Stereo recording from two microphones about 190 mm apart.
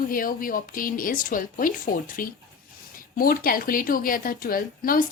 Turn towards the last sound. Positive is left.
turn(degrees=50)  # may be behind; listen again after turning